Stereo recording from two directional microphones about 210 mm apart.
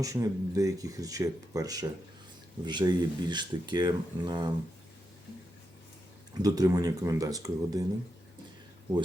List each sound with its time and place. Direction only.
0.0 s speech: 15° right (ahead or behind)
6.4 s speech: 15° right (ahead or behind)